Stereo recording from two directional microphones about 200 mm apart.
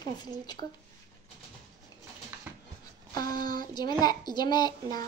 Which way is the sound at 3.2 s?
20° left (ahead or behind).